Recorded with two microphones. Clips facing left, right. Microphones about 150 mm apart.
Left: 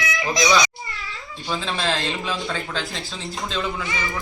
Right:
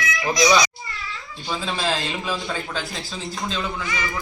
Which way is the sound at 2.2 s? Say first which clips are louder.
Even; 10° right (ahead or behind).